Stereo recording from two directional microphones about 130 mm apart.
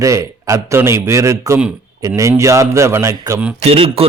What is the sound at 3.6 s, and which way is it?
Speech, 50° right (ahead or behind).